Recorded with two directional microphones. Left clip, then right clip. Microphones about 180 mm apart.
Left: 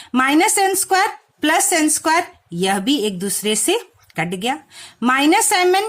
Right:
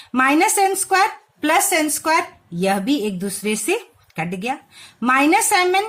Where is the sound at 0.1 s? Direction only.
45° left (ahead or behind).